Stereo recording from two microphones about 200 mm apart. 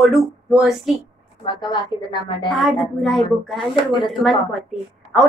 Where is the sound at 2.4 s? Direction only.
Centre (ahead or behind).